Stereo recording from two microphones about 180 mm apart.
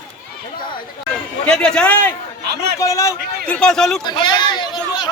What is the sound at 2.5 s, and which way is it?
Speech, 65° right (ahead or behind).